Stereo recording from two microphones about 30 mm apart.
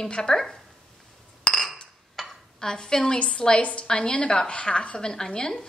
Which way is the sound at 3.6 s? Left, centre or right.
Left.